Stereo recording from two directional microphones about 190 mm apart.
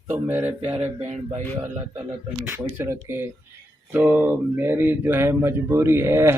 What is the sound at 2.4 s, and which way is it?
Speech, 10° right (ahead or behind).